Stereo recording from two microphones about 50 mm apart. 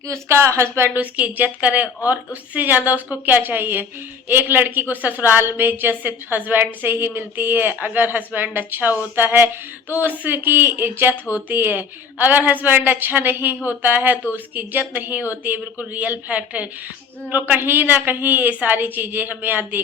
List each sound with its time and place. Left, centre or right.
0.1 s speech: right
0.9 s a woman's voice: right
5.4 s a woman's voice: right
17.3 s a woman's voice: right